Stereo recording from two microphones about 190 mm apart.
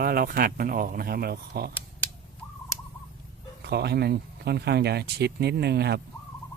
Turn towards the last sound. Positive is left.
turn(degrees=-60)  # may be behind; listen again after turning